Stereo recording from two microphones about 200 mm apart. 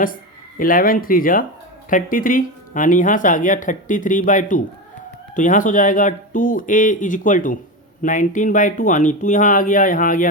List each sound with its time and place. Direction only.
0.6 s speech: 45° left (ahead or behind)